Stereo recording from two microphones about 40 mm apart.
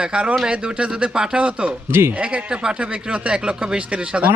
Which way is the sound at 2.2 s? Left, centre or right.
Right.